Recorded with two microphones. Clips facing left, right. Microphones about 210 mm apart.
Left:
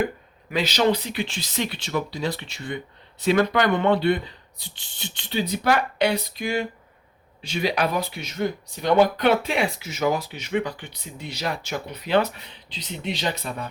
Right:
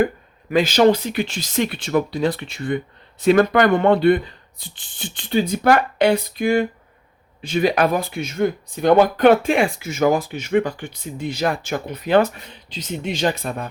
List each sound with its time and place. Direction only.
0.5 s speech: 50° right (ahead or behind)